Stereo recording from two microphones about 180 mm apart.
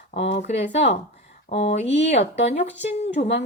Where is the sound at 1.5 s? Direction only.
35° left (ahead or behind).